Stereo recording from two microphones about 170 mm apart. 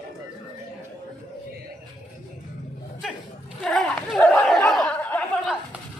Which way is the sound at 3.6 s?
Centre (ahead or behind).